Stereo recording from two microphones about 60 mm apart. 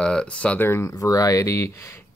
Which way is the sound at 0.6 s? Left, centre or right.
Left.